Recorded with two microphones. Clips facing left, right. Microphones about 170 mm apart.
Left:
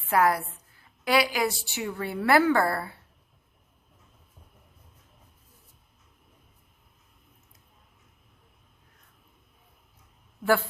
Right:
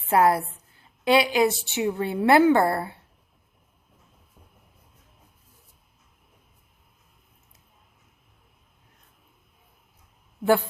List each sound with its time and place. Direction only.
0.1 s a woman's voice: 25° right (ahead or behind)